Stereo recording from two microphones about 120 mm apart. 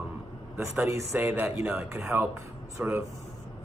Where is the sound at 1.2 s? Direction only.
10° right (ahead or behind).